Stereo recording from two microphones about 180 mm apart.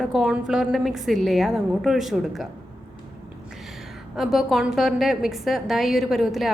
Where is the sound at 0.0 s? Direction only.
5° right (ahead or behind).